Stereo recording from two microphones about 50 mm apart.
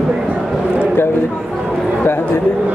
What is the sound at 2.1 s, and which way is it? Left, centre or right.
Speech, left.